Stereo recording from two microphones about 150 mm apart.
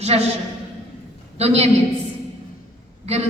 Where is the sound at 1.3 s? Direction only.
45° right (ahead or behind).